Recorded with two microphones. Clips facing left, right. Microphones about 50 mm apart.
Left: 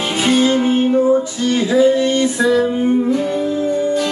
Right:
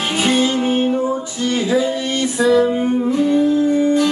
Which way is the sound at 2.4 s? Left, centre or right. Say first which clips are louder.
Right 3 dB; centre.